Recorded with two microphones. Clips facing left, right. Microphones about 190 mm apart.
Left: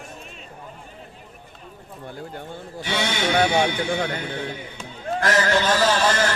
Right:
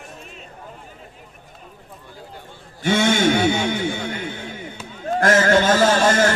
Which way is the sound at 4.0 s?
50° left (ahead or behind).